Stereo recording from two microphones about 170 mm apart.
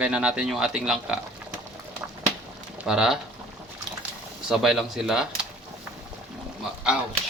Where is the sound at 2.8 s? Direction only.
5° right (ahead or behind).